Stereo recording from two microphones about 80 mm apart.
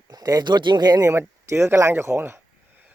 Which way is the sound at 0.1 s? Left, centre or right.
Right.